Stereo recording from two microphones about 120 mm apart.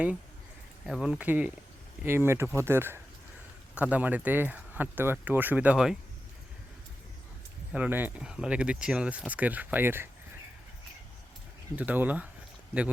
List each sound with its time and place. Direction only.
0.9 s speech: centre (ahead or behind)
1.2 s speech: 15° right (ahead or behind)
7.7 s speech: 15° right (ahead or behind)
11.8 s speech: 15° right (ahead or behind)